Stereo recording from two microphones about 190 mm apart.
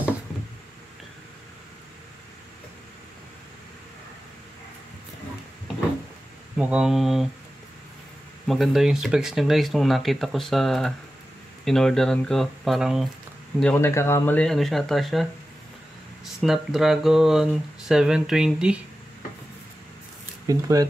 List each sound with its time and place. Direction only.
6.6 s speech: 5° right (ahead or behind)
8.5 s speech: centre (ahead or behind)
13.6 s speech: 10° left (ahead or behind)
16.3 s speech: centre (ahead or behind)
20.4 s speech: 20° right (ahead or behind)